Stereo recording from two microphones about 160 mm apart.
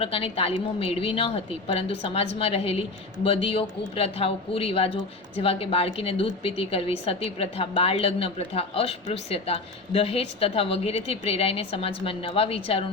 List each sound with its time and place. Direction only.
0.0 s a woman's voice: 35° left (ahead or behind)